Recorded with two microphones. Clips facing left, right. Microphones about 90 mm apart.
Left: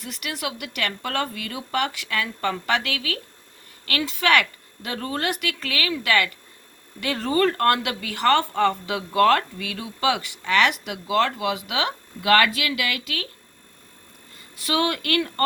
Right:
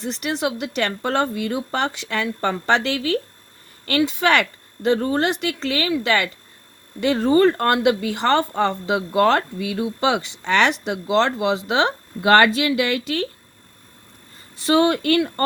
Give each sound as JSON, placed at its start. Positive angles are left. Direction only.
{"t": 0.0, "sound": "a woman's voice", "side_deg": -30}
{"t": 14.6, "sound": "a woman's voice", "side_deg": -25}